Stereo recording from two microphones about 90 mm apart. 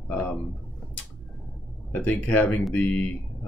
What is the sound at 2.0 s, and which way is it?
Speech, 15° left (ahead or behind).